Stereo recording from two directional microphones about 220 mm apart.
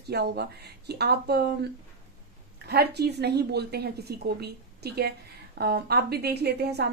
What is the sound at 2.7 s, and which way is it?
A woman's voice, 45° right (ahead or behind).